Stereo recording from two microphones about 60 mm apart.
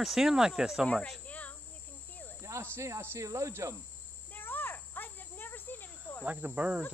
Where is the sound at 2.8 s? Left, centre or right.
Right.